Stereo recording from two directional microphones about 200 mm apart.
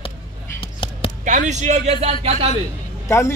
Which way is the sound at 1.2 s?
35° right (ahead or behind).